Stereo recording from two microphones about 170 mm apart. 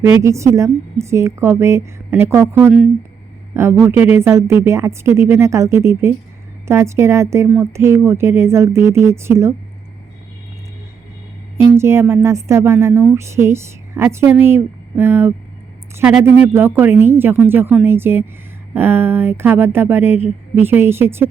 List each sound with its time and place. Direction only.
0.2 s speech: 15° right (ahead or behind)
2.6 s speech: centre (ahead or behind)
3.5 s speech: 15° right (ahead or behind)
11.5 s speech: 15° right (ahead or behind)